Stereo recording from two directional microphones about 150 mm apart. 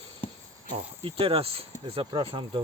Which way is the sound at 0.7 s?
35° right (ahead or behind).